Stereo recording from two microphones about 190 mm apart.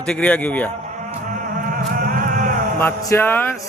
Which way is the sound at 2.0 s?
45° right (ahead or behind).